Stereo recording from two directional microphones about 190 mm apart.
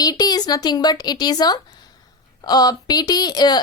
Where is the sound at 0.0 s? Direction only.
20° left (ahead or behind).